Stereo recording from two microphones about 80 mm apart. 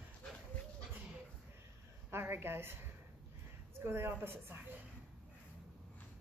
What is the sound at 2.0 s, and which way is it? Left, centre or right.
Speech, right.